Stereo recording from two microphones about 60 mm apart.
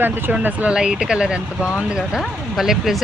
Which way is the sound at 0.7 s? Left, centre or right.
Centre.